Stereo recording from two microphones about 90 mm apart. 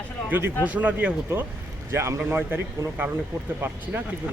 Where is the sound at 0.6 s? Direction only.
15° right (ahead or behind).